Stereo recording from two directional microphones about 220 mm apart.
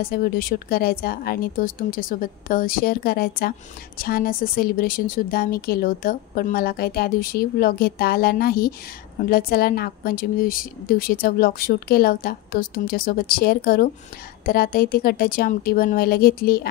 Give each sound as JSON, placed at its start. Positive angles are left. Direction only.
{"t": 0.0, "sound": "speech", "side_deg": 45}